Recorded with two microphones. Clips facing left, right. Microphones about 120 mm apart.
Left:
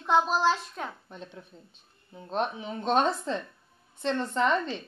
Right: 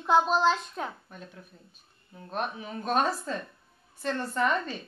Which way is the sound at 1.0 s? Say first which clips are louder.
Left 3 dB; 25° left (ahead or behind).